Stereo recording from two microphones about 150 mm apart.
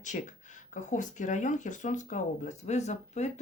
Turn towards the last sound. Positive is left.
turn(degrees=50)  # may be behind; listen again after turning